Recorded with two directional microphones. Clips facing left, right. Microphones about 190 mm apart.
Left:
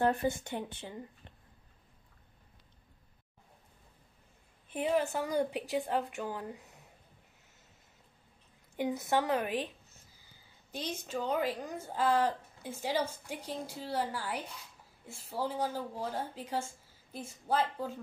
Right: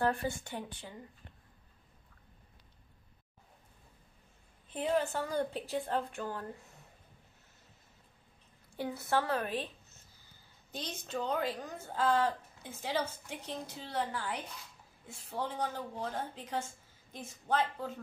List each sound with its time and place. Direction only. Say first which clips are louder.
0.0 s speech: left 3 dB; 20° left (ahead or behind)
4.6 s a woman's voice: left 1 dB; 10° left (ahead or behind)
8.7 s a woman's voice: left 2 dB; 15° left (ahead or behind)
10.7 s a woman's voice: left 2 dB; 10° left (ahead or behind)